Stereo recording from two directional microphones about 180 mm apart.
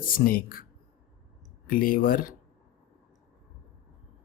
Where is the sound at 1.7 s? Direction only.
50° left (ahead or behind).